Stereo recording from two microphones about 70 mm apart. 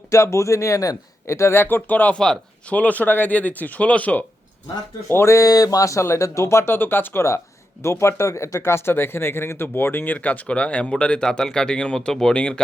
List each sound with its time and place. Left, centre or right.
0.1 s speech: left
2.1 s speech: centre
2.6 s speech: left
5.0 s speech: left
6.7 s speech: left; by 12.5 s centre